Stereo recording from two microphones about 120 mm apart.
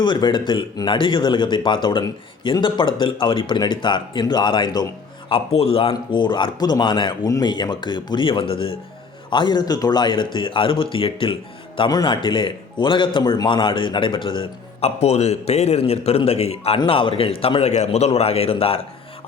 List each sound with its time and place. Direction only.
0.0 s a man's voice: 40° left (ahead or behind)
5.3 s a man's voice: 55° left (ahead or behind)
9.3 s a man's voice: 40° left (ahead or behind)
11.9 s a man's voice: 35° left (ahead or behind)
14.8 s a man's voice: 60° left (ahead or behind)